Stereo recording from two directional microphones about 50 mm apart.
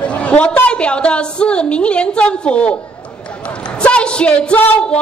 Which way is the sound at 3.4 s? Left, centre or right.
Left.